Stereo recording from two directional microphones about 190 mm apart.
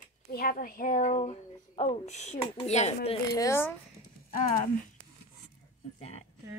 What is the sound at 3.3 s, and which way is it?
Speech, 15° left (ahead or behind).